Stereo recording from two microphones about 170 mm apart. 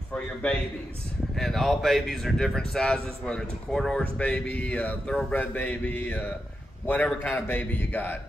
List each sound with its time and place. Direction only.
0.1 s a man's voice: 5° left (ahead or behind)
4.2 s mantra: 5° left (ahead or behind)